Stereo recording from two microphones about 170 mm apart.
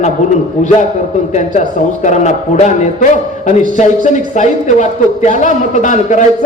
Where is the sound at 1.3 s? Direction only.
45° left (ahead or behind).